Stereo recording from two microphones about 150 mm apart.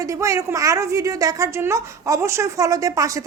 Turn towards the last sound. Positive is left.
turn(degrees=-20)  # may be behind; listen again after turning